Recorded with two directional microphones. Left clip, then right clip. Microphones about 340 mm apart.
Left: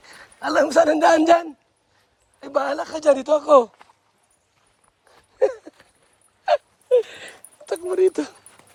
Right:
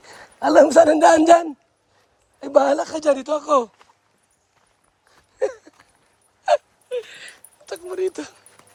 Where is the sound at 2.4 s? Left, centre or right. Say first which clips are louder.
Right 6 dB; centre.